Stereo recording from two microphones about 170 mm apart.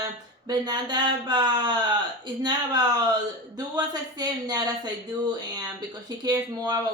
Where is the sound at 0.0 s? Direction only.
25° right (ahead or behind).